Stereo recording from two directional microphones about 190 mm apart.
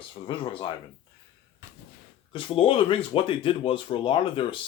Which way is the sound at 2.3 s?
25° left (ahead or behind).